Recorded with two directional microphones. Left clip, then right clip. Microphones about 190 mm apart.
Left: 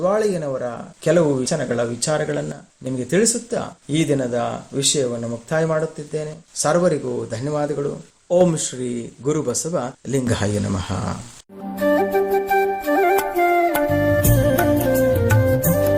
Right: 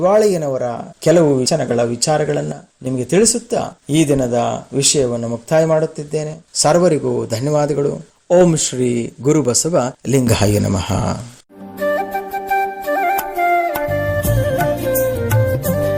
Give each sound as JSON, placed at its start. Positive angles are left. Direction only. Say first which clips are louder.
{"t": 0.0, "sound": "speech", "louder": "right 6 dB", "side_deg": -30}
{"t": 11.8, "sound": "flute", "louder": "left 1 dB", "side_deg": 0}